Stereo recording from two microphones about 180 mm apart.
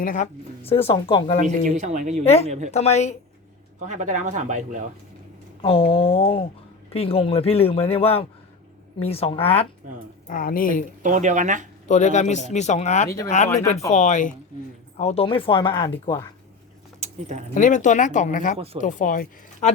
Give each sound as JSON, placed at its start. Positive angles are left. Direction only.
{"t": 0.0, "sound": "speech", "side_deg": 45}
{"t": 0.6, "sound": "a man's voice", "side_deg": 35}
{"t": 1.5, "sound": "speech", "side_deg": -40}
{"t": 2.2, "sound": "a man's voice", "side_deg": 35}
{"t": 2.5, "sound": "speech", "side_deg": -40}
{"t": 2.7, "sound": "a man's voice", "side_deg": 35}
{"t": 3.8, "sound": "speech", "side_deg": -45}
{"t": 5.6, "sound": "a man's voice", "side_deg": 30}
{"t": 10.2, "sound": "speech", "side_deg": 50}
{"t": 11.0, "sound": "speech", "side_deg": -45}
{"t": 11.9, "sound": "a man's voice", "side_deg": 40}
{"t": 17.0, "sound": "a sound", "side_deg": -40}
{"t": 17.5, "sound": "speech", "side_deg": 45}